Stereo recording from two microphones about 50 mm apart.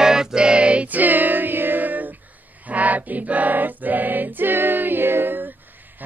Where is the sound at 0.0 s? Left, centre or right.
Centre.